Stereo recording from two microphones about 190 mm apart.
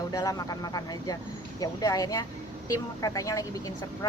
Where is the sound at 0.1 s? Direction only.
20° left (ahead or behind).